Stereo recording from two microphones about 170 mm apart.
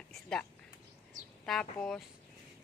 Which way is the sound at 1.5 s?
5° left (ahead or behind).